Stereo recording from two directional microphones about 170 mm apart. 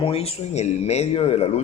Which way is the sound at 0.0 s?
35° left (ahead or behind).